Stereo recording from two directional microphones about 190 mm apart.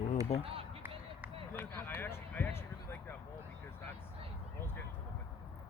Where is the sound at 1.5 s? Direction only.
10° left (ahead or behind).